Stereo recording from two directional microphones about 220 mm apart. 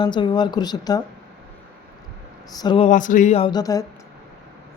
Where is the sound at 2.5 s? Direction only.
20° left (ahead or behind).